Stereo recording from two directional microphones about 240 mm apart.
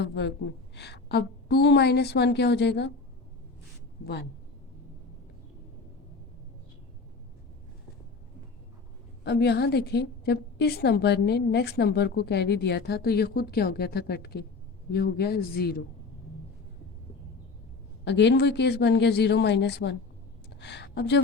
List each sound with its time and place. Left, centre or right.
0.0 s a woman's voice: left
4.0 s a woman's voice: left
9.2 s a woman's voice: left
18.0 s a woman's voice: left
20.5 s a sound: left